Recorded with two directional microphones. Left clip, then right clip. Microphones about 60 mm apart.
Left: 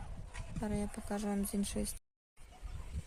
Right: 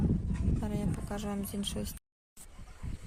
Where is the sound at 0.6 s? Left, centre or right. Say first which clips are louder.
Right 2 dB; left.